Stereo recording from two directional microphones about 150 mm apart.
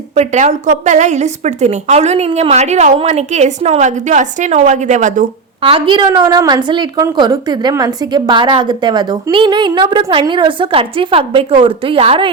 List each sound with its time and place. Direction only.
0.2 s a woman's voice: 55° right (ahead or behind)
5.6 s a woman's voice: 35° right (ahead or behind)